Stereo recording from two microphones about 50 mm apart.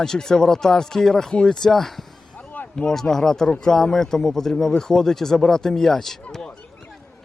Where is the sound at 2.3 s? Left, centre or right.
Left.